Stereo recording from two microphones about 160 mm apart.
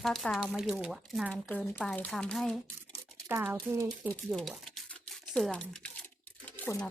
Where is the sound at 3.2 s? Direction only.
15° right (ahead or behind).